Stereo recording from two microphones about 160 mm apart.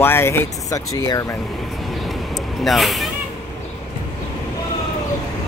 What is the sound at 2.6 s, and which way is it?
Speech, centre (ahead or behind).